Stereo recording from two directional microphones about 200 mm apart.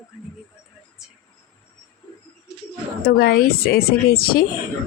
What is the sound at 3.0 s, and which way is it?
Speech, 50° left (ahead or behind).